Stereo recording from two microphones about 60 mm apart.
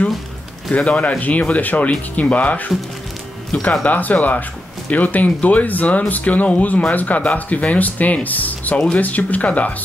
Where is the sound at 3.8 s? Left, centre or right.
Left.